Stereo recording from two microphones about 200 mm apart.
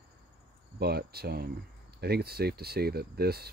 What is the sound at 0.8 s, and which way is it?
Speech, 50° right (ahead or behind).